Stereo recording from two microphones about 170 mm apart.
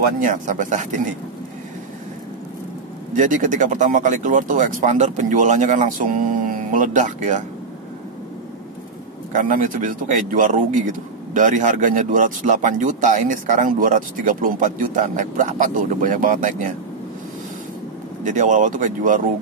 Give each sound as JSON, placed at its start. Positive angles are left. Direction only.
{"t": 0.2, "sound": "speech", "side_deg": -50}
{"t": 3.1, "sound": "speech", "side_deg": -50}
{"t": 9.3, "sound": "speech", "side_deg": -50}
{"t": 18.2, "sound": "speech", "side_deg": -45}